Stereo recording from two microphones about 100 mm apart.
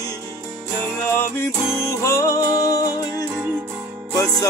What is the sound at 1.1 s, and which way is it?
Music, 25° left (ahead or behind).